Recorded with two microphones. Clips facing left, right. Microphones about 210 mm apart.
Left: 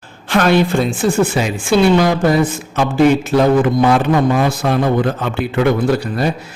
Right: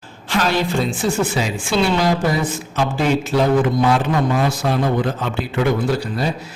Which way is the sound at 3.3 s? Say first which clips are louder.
Left 4 dB; 55° left (ahead or behind).